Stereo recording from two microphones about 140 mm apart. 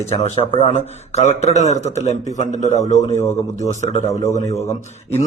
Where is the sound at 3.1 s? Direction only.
20° left (ahead or behind).